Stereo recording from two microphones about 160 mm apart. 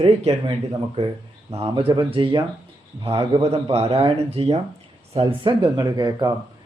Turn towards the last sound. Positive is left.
turn(degrees=-25)  # may be behind; listen again after turning